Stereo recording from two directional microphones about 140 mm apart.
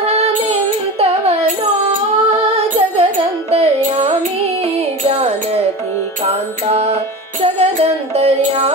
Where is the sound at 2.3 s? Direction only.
50° right (ahead or behind).